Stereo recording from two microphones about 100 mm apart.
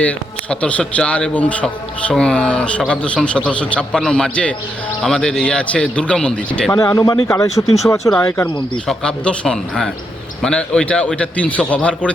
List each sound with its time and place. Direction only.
0.0 s speech: 10° left (ahead or behind)
6.7 s speech: 35° left (ahead or behind)
8.9 s speech: 10° left (ahead or behind)